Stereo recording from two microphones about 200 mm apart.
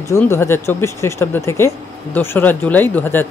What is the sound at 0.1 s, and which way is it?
Speech, 10° left (ahead or behind).